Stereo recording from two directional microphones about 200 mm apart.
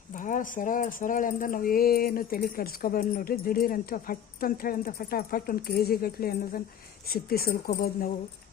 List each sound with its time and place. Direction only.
0.2 s speech: 40° left (ahead or behind)